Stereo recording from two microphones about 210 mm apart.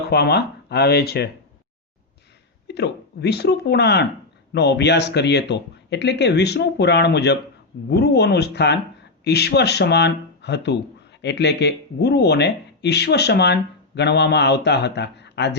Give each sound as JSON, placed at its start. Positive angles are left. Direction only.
{"t": 0.1, "sound": "speech", "side_deg": 50}
{"t": 2.6, "sound": "speech", "side_deg": 50}